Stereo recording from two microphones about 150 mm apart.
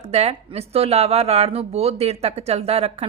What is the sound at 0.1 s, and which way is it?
Speech, 45° right (ahead or behind).